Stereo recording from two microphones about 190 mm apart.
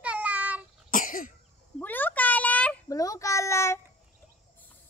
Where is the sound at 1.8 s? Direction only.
10° left (ahead or behind).